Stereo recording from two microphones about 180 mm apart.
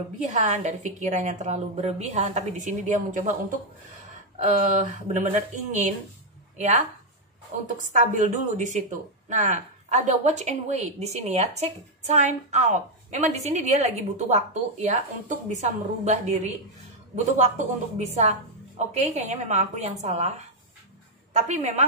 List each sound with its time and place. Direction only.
0.2 s a woman's voice: 40° right (ahead or behind)
4.6 s speech: 45° right (ahead or behind)
7.7 s a woman's voice: 45° right (ahead or behind)